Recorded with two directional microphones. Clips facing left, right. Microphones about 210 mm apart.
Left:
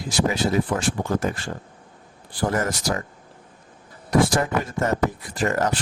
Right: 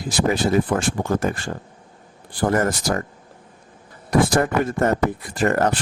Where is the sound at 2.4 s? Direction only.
55° right (ahead or behind).